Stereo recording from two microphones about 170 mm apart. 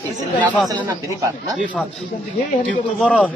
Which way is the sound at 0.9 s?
20° right (ahead or behind).